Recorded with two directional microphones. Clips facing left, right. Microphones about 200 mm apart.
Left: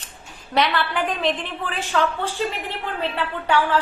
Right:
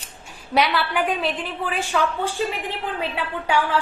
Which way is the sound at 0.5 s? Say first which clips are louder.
Right 1 dB; 10° right (ahead or behind).